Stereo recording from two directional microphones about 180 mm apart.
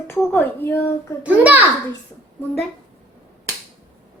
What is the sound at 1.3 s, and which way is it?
Speech, 10° right (ahead or behind).